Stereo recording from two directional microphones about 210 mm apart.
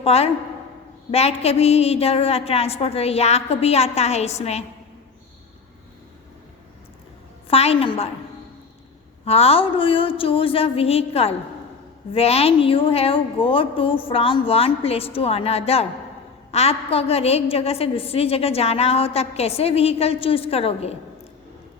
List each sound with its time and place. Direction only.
0.0 s a woman's voice: 30° left (ahead or behind)
7.4 s a woman's voice: 30° left (ahead or behind)
9.2 s a woman's voice: 30° left (ahead or behind)